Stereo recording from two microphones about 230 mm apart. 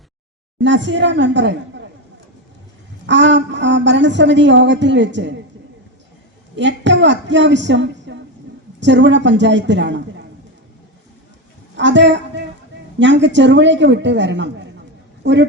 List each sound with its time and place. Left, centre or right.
0.6 s a woman's voice: right
3.1 s a woman's voice: right
6.6 s a woman's voice: right
11.8 s a woman's voice: right